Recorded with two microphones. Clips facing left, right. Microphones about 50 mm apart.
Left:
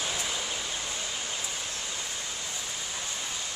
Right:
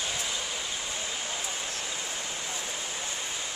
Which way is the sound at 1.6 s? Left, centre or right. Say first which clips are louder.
Right 1 dB; right.